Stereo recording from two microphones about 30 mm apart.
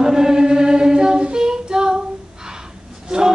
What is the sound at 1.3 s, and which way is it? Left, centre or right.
Female singing, right.